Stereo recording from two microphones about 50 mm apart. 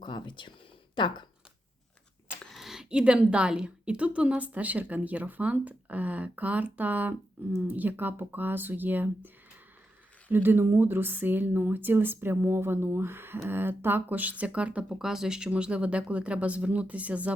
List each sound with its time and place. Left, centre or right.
2.5 s a sound: centre
2.9 s speech: right
14.9 s speech: centre
15.4 s speech: right